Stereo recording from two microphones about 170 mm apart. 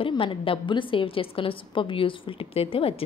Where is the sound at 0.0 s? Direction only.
30° left (ahead or behind).